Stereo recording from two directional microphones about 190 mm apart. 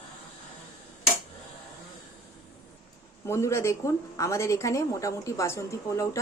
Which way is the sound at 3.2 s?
15° left (ahead or behind).